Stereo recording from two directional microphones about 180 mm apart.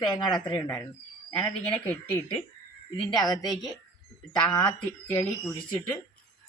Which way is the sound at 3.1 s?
20° left (ahead or behind).